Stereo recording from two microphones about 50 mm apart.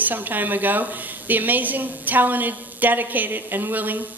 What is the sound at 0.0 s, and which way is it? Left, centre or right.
A woman's voice, right.